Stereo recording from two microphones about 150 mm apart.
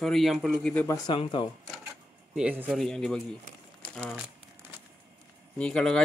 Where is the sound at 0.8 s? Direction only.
30° left (ahead or behind).